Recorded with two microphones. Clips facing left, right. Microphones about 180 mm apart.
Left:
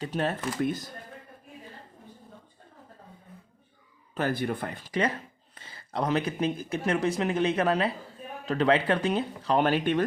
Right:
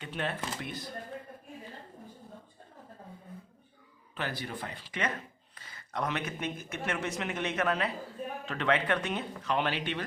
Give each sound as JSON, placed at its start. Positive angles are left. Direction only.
{"t": 0.0, "sound": "speech", "side_deg": 40}
{"t": 4.1, "sound": "speech", "side_deg": 45}
{"t": 5.5, "sound": "speech", "side_deg": 30}